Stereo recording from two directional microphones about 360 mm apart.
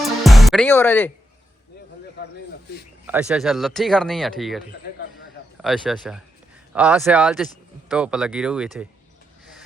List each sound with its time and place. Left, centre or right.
0.0 s music: centre
2.2 s speech: left
3.1 s speech: centre
5.6 s speech: centre